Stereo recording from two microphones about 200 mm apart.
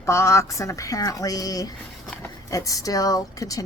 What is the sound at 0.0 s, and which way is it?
A woman's voice, 15° left (ahead or behind).